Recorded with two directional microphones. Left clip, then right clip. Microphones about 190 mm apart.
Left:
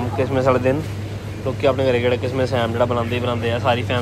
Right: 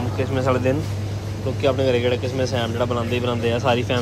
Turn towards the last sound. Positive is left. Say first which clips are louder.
# left 1 dB
turn(degrees=-25)  # may be behind; listen again after turning